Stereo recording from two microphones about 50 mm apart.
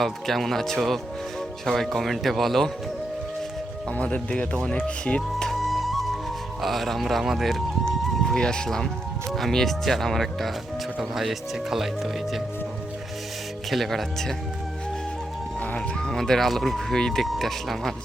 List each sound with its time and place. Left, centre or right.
0.0 s speech: centre
3.9 s speech: left
5.5 s music: centre
6.6 s speech: centre
7.9 s speech: centre
13.7 s speech: centre
16.0 s speech: centre